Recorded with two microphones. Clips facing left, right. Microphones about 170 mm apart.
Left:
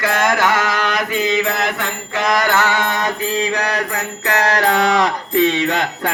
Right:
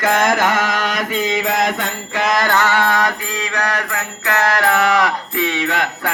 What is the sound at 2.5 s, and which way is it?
Mantra, 15° left (ahead or behind).